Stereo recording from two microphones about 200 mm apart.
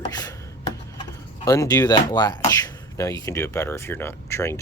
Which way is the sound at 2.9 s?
15° left (ahead or behind).